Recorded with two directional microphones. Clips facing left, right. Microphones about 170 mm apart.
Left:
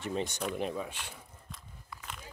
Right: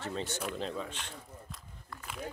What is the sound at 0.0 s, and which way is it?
Speech, 15° left (ahead or behind).